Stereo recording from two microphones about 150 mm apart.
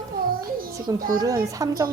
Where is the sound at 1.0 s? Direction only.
70° right (ahead or behind).